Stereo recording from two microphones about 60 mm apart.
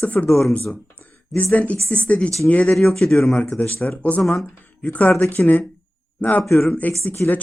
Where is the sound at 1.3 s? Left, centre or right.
Left.